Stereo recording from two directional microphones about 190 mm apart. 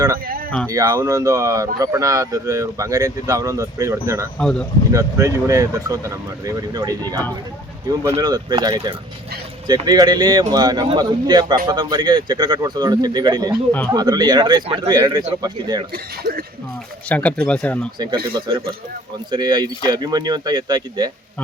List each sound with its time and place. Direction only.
0.7 s speech: 15° right (ahead or behind)
4.4 s speech: 5° left (ahead or behind)
4.9 s speech: 15° right (ahead or behind)
8.0 s speech: 20° right (ahead or behind)
17.1 s speech: 5° left (ahead or behind)
18.3 s speech: 25° right (ahead or behind)